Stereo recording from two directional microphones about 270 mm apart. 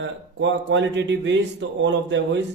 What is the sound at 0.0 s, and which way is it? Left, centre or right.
A man's voice, right.